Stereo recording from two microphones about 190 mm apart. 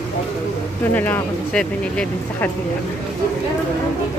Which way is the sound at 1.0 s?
10° left (ahead or behind).